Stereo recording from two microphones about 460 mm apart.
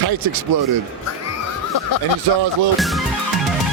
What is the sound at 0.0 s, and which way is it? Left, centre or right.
Speech, right.